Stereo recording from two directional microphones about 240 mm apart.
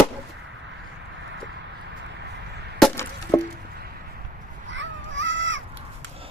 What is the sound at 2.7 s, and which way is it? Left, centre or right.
Chop, centre.